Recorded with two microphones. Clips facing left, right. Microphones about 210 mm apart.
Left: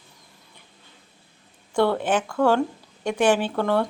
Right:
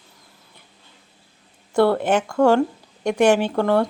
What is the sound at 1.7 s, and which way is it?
A woman's voice, 10° right (ahead or behind).